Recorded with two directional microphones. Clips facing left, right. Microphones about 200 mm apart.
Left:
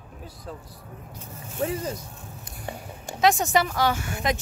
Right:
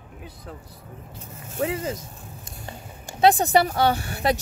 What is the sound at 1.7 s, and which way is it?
Speech, 90° right.